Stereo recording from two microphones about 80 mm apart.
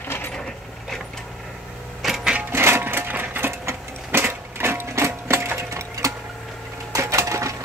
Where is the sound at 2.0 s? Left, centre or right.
Centre.